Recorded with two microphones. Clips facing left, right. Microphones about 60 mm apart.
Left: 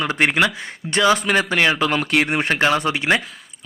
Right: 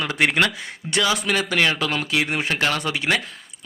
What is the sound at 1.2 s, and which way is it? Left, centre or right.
A man's voice, left.